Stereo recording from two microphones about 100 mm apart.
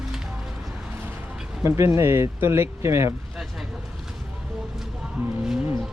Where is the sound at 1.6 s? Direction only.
30° right (ahead or behind).